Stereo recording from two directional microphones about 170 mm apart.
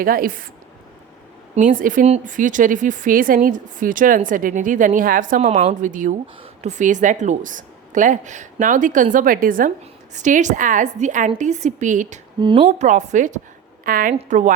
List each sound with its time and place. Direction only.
0.0 s a woman's voice: 55° right (ahead or behind)
1.5 s speech: 50° right (ahead or behind)
12.4 s a woman's voice: 30° right (ahead or behind)
12.6 s speech: 45° right (ahead or behind)
13.8 s a woman's voice: 55° right (ahead or behind)
14.2 s speech: 45° right (ahead or behind)